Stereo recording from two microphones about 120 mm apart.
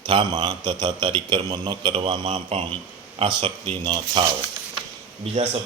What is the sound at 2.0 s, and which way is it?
Speech, 55° right (ahead or behind).